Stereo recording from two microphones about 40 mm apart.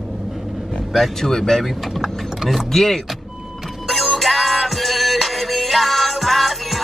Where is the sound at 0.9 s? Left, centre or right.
Centre.